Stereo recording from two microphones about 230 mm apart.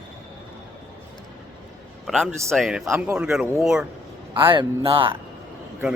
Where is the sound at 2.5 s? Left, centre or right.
Centre.